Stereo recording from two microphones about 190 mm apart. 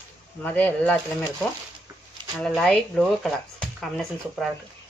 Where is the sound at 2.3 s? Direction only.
5° left (ahead or behind).